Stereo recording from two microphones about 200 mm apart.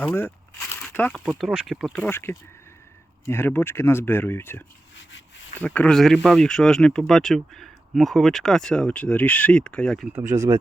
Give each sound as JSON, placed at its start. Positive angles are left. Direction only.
{"t": 0.0, "sound": "speech", "side_deg": 10}
{"t": 4.9, "sound": "rub", "side_deg": 70}
{"t": 5.5, "sound": "speech", "side_deg": 5}